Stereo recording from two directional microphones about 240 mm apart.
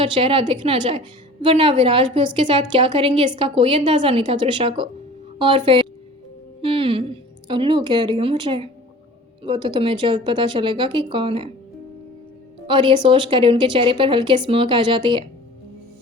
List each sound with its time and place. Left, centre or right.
0.0 s a woman's voice: right
12.6 s a woman's voice: right